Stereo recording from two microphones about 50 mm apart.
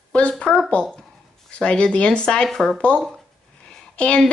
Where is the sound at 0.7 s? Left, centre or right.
Centre.